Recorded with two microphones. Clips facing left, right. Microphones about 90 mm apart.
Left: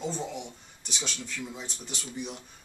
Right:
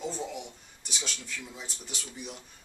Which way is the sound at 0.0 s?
5° right (ahead or behind).